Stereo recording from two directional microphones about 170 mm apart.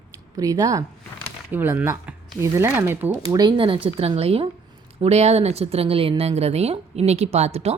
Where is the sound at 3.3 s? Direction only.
25° right (ahead or behind).